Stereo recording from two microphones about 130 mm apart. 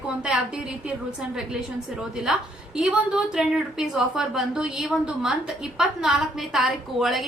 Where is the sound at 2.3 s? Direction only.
5° right (ahead or behind).